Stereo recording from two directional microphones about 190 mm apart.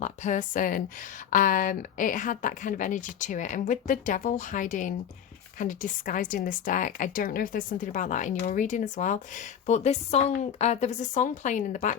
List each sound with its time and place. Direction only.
0.0 s a woman's voice: 40° left (ahead or behind)